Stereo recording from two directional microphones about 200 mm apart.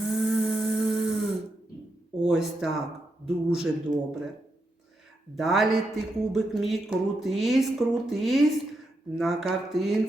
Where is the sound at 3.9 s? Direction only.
20° right (ahead or behind).